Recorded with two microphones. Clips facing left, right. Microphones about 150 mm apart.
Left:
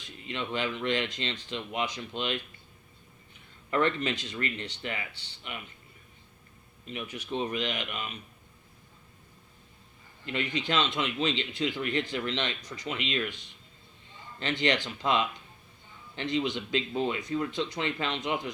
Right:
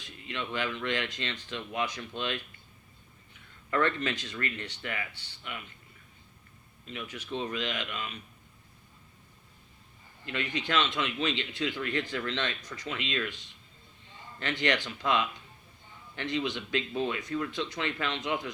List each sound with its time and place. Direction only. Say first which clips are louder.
0.3 s speech: left 2 dB; 25° left (ahead or behind)
3.7 s speech: left 1 dB; 25° left (ahead or behind)
7.4 s speech: left 2 dB; 20° left (ahead or behind)
10.2 s speech: left 2 dB; 25° left (ahead or behind)
14.3 s speech: left 2 dB; 25° left (ahead or behind)